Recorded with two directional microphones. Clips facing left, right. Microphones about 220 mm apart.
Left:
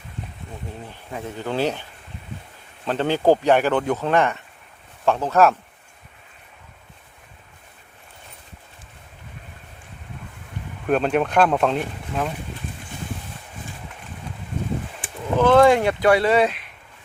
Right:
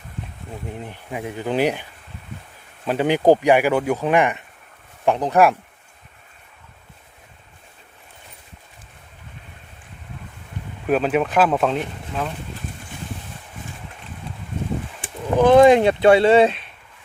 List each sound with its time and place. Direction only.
0.9 s speech: 15° right (ahead or behind)
10.8 s speech: 5° right (ahead or behind)
15.4 s speech: 15° right (ahead or behind)